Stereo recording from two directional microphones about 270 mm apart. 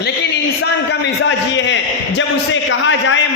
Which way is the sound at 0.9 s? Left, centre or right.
Left.